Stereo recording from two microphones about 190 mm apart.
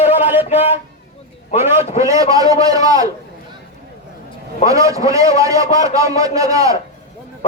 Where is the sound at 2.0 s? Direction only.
15° right (ahead or behind).